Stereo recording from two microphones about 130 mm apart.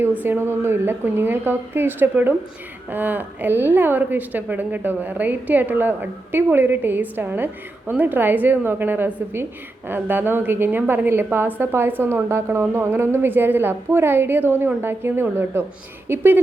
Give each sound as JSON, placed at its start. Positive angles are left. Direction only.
{"t": 0.0, "sound": "a woman's voice", "side_deg": -15}